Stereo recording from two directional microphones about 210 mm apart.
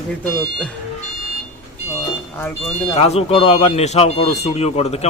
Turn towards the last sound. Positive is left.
turn(degrees=30)  # may be behind; listen again after turning